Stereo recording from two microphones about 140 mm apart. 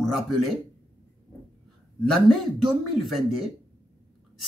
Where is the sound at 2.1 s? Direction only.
Centre (ahead or behind).